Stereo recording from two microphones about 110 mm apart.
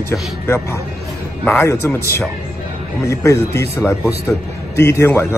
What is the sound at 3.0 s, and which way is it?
A man's voice, 30° left (ahead or behind).